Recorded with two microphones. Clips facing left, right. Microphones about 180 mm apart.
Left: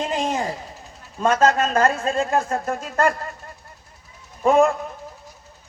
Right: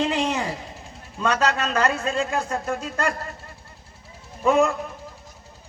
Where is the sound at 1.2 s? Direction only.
45° left (ahead or behind).